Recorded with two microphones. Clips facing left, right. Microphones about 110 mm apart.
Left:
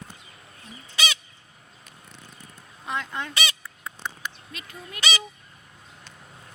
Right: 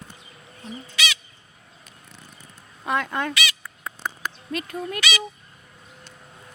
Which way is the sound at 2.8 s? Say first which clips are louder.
Right 6 dB; 60° right (ahead or behind).